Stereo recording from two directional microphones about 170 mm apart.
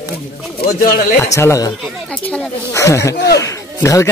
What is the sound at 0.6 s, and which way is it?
Speech, 60° left (ahead or behind).